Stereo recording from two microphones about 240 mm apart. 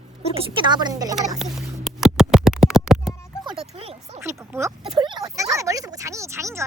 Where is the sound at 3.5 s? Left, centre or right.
Right.